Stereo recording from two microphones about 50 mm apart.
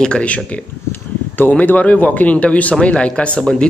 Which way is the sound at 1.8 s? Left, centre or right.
Left.